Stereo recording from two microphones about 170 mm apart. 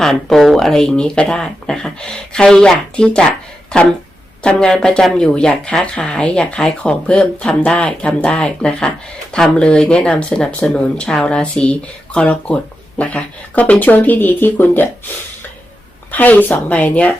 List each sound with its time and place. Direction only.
0.0 s speech: centre (ahead or behind)
16.1 s speech: 10° left (ahead or behind)